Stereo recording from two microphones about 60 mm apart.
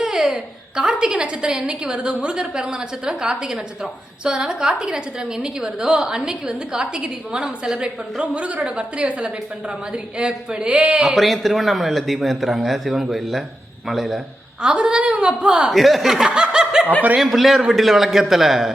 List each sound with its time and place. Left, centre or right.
0.0 s a woman's voice: centre
7.8 s a woman's voice: right
11.0 s speech: centre
14.6 s a woman's voice: centre
15.7 s speech: centre
17.2 s speech: centre